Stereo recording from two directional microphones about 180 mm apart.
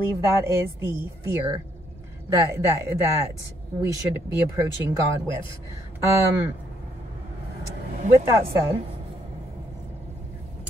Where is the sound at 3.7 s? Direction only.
15° right (ahead or behind).